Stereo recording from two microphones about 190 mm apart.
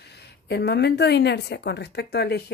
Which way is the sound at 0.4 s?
60° left (ahead or behind).